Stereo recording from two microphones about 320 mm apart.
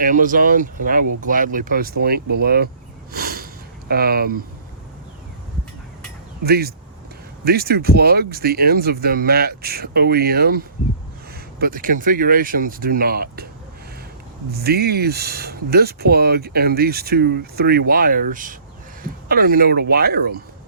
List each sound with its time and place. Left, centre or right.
0.0 s speech: right
3.1 s sniff: right
6.4 s speech: right
11.6 s speech: right
14.5 s speech: right